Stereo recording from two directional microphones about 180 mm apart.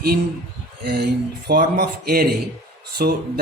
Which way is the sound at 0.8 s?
60° right (ahead or behind).